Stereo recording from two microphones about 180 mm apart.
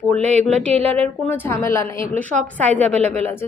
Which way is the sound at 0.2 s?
40° right (ahead or behind).